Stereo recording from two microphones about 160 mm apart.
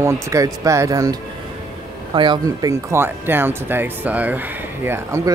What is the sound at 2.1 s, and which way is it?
Speech, 30° right (ahead or behind).